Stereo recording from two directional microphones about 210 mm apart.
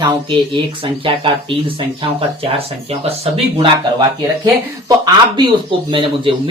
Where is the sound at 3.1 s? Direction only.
30° right (ahead or behind).